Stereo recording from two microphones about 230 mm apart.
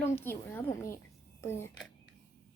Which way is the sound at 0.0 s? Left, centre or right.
Centre.